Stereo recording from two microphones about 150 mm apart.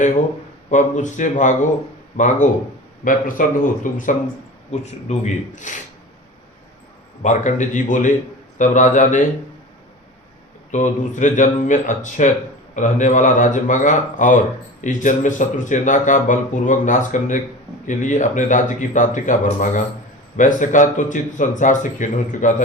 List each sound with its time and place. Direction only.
0.7 s speech: 55° left (ahead or behind)
4.7 s speech: 50° left (ahead or behind)
7.2 s speech: 55° left (ahead or behind)
10.7 s speech: 55° left (ahead or behind)